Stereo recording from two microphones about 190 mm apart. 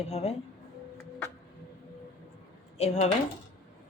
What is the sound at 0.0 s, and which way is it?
Speech, 35° left (ahead or behind).